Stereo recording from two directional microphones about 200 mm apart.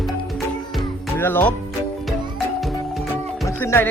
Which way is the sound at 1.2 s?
10° left (ahead or behind).